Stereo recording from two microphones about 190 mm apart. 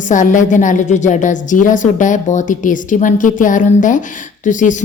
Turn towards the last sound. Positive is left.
turn(degrees=40)  # may be behind; listen again after turning